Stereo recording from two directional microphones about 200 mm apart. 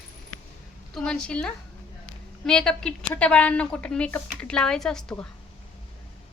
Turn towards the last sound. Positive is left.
turn(degrees=5)  # may be behind; listen again after turning